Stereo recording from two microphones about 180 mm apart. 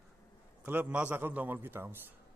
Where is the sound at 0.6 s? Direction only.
10° right (ahead or behind).